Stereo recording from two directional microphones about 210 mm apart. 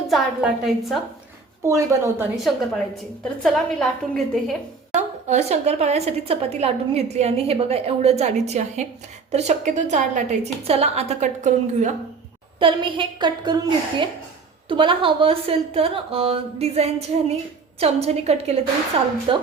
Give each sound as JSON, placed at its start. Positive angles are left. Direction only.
{"t": 0.1, "sound": "a woman's voice", "side_deg": 0}
{"t": 1.6, "sound": "a woman's voice", "side_deg": -15}
{"t": 2.3, "sound": "a woman's voice", "side_deg": 0}
{"t": 4.9, "sound": "a woman's voice", "side_deg": -35}
{"t": 12.5, "sound": "a woman's voice", "side_deg": -25}